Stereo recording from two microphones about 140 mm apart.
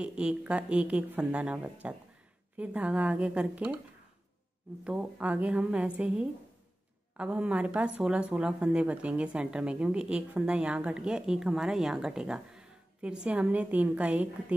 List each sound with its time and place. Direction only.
0.0 s speech: 5° right (ahead or behind)
4.8 s speech: 10° right (ahead or behind)